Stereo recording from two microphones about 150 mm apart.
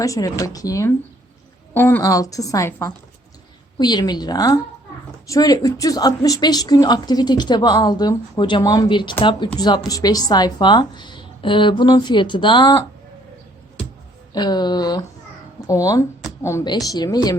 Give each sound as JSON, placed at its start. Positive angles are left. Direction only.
{"t": 0.0, "sound": "speech", "side_deg": 20}
{"t": 14.3, "sound": "speech", "side_deg": 30}